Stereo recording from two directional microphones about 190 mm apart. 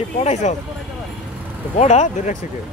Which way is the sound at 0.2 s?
35° left (ahead or behind).